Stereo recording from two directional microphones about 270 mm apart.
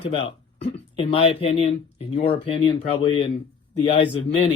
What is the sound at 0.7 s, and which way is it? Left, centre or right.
Speech, left.